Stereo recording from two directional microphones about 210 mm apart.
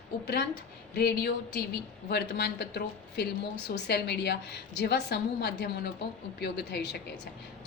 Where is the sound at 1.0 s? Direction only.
50° left (ahead or behind).